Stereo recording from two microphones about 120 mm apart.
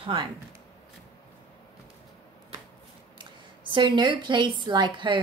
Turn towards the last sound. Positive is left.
turn(degrees=-40)  # may be behind; listen again after turning